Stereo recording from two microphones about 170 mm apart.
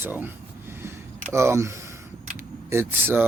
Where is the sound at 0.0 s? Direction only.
10° right (ahead or behind).